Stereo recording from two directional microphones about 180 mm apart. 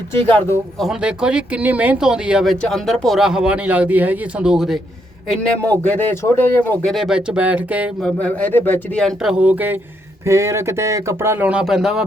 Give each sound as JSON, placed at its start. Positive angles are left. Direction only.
{"t": 0.3, "sound": "a man's voice", "side_deg": 10}
{"t": 0.8, "sound": "speech", "side_deg": -5}
{"t": 5.3, "sound": "a man's voice", "side_deg": 10}
{"t": 6.9, "sound": "speech", "side_deg": -5}
{"t": 8.0, "sound": "speech", "side_deg": 10}